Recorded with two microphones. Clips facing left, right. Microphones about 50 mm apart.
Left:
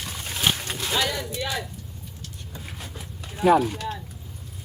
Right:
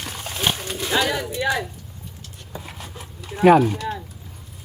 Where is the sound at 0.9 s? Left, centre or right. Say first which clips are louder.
Right 5 dB; right.